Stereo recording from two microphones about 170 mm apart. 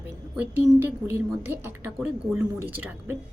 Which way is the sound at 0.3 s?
10° right (ahead or behind).